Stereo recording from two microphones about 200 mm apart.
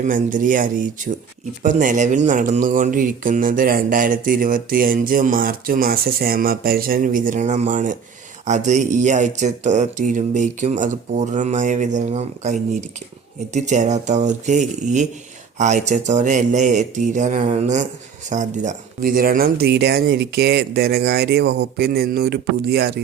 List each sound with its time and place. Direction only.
0.0 s speech: 40° right (ahead or behind)